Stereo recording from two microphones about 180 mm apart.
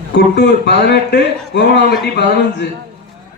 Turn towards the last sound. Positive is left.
turn(degrees=70)  # may be behind; listen again after turning